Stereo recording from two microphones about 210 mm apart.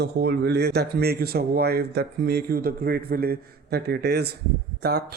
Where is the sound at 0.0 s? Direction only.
50° right (ahead or behind).